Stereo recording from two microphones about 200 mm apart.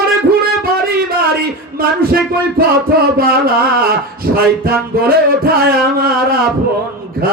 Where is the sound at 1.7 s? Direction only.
45° right (ahead or behind).